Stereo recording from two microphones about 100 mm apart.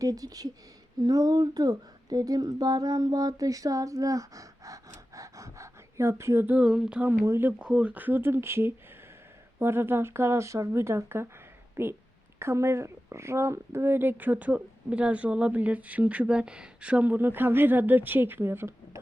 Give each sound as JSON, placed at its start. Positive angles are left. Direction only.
{"t": 0.0, "sound": "speech", "side_deg": -40}
{"t": 1.0, "sound": "child singing", "side_deg": -40}
{"t": 7.3, "sound": "speech", "side_deg": -25}
{"t": 7.6, "sound": "speech", "side_deg": -10}